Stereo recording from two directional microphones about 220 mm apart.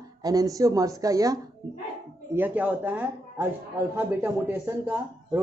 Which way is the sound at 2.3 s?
5° right (ahead or behind).